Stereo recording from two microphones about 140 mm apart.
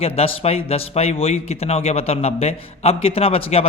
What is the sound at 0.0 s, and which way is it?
A man's voice, 45° left (ahead or behind).